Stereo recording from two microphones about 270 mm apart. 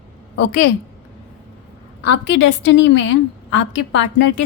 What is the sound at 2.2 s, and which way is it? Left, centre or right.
A woman's voice, left.